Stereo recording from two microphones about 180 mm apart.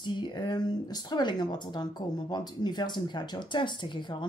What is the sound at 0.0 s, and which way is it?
Speech, 25° left (ahead or behind).